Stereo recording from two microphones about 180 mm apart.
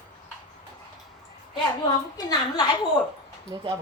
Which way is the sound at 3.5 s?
20° right (ahead or behind).